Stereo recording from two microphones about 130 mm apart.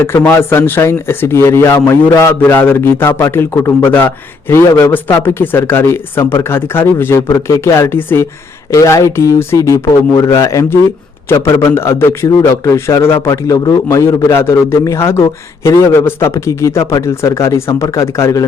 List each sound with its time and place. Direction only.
0.0 s a man's voice: 15° left (ahead or behind)